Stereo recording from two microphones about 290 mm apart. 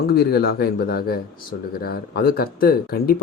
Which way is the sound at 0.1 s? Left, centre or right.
Left.